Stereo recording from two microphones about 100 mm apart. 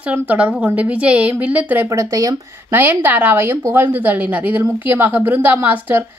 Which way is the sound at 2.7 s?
20° right (ahead or behind).